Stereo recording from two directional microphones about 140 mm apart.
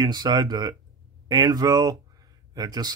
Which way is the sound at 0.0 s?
30° right (ahead or behind).